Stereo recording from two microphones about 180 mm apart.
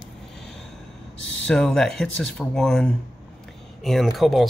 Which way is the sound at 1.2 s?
90° left.